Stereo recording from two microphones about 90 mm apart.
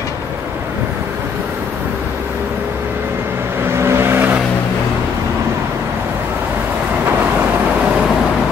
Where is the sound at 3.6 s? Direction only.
30° right (ahead or behind).